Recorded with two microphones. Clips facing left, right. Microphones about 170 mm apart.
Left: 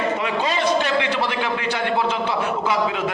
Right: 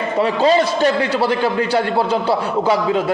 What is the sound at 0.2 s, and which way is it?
A man's voice, 35° right (ahead or behind).